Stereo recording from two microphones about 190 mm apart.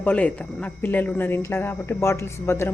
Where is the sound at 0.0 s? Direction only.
10° left (ahead or behind).